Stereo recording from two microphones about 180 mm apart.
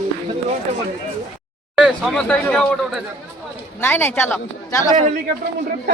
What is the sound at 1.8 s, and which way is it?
A man's voice, centre (ahead or behind).